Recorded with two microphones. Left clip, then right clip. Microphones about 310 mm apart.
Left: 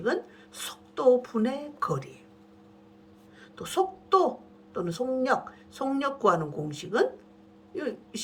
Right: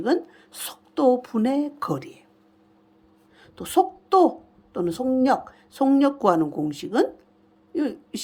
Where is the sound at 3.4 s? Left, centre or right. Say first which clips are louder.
Right 7 dB; right.